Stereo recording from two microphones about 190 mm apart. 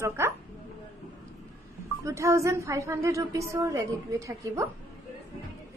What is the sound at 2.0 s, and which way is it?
A woman's voice, 15° right (ahead or behind).